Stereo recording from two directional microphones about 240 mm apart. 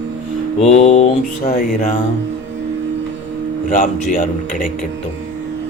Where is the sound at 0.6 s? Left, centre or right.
Left.